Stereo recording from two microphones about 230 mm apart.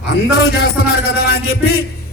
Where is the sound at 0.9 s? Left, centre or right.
Left.